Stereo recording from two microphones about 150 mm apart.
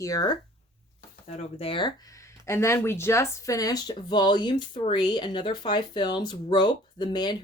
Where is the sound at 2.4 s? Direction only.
15° left (ahead or behind).